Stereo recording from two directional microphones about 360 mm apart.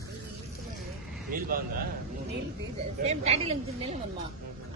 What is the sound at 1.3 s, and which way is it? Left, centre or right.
Speech, right.